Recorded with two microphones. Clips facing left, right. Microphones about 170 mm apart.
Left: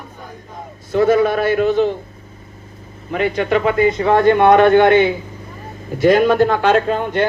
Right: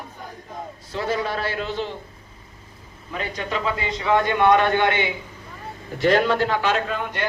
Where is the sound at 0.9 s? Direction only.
55° left (ahead or behind).